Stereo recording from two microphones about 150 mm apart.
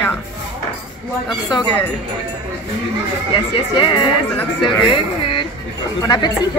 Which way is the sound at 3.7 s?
30° left (ahead or behind).